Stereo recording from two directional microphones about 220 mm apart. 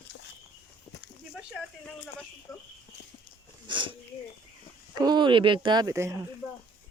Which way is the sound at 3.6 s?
20° right (ahead or behind).